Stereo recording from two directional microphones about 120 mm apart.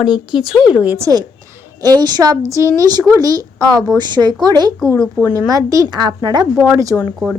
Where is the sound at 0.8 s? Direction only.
15° right (ahead or behind).